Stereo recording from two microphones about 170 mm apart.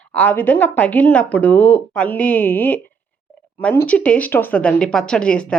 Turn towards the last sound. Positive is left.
turn(degrees=5)  # may be behind; listen again after turning